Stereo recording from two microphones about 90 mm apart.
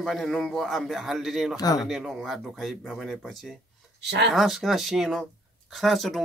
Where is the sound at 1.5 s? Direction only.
45° left (ahead or behind).